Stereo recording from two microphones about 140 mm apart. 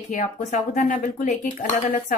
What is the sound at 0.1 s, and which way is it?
Speech, 55° left (ahead or behind).